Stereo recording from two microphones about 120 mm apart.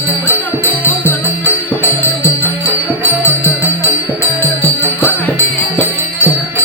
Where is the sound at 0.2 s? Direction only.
15° left (ahead or behind).